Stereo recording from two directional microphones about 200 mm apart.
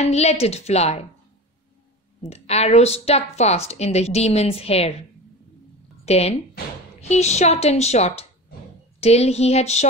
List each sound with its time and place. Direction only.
0.0 s a woman's voice: 30° left (ahead or behind)
2.2 s a woman's voice: 30° left (ahead or behind)
6.0 s a woman's voice: 30° left (ahead or behind)